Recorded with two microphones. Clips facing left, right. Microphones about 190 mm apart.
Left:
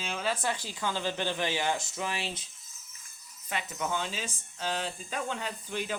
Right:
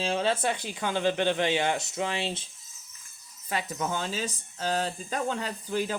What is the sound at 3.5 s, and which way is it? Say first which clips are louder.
Speech: right 3 dB; 35° right (ahead or behind).